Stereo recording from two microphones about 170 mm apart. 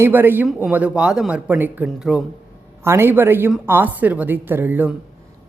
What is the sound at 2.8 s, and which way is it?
A woman's voice, 15° right (ahead or behind).